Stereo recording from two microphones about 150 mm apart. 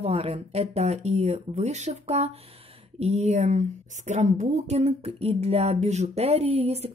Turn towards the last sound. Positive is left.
turn(degrees=-45)  # may be behind; listen again after turning